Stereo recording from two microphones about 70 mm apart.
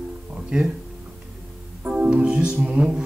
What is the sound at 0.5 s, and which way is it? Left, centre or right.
Speech, centre.